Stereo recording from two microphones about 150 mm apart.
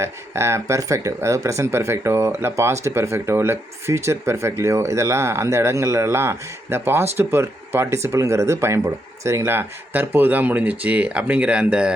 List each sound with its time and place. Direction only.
0.0 s speech: 15° right (ahead or behind)